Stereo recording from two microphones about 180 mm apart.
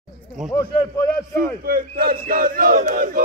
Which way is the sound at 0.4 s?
Centre (ahead or behind).